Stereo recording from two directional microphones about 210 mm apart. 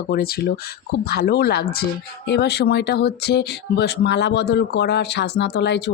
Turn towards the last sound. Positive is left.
turn(degrees=55)  # may be behind; listen again after turning